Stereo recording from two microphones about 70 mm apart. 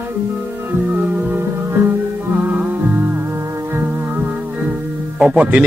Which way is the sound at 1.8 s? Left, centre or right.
Right.